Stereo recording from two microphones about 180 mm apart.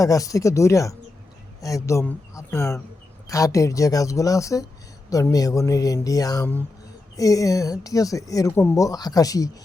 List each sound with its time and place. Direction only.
0.0 s speech: 20° left (ahead or behind)